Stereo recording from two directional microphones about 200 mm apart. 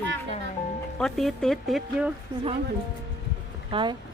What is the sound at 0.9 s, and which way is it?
Speech, centre (ahead or behind).